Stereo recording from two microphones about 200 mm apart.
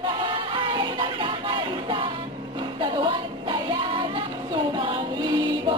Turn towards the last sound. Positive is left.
turn(degrees=-25)  # may be behind; listen again after turning